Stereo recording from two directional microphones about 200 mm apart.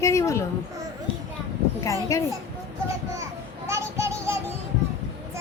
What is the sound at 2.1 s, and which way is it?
Speech, 15° left (ahead or behind).